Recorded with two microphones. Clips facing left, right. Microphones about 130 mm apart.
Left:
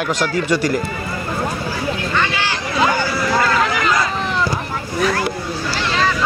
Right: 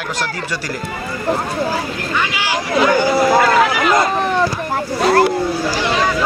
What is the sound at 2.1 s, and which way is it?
Speech, 10° right (ahead or behind).